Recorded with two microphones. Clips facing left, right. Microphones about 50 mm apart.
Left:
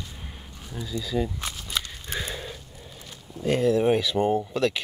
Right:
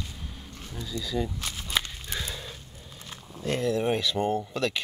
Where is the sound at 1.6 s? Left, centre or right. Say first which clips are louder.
Right 4 dB; right.